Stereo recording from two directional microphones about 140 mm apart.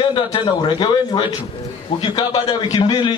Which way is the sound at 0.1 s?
35° left (ahead or behind).